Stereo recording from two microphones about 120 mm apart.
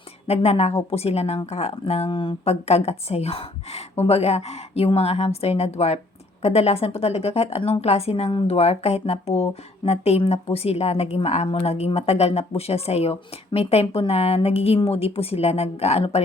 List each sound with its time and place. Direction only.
0.3 s a woman's voice: 60° left (ahead or behind)